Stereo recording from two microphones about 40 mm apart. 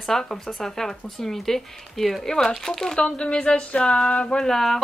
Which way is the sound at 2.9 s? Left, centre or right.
Left.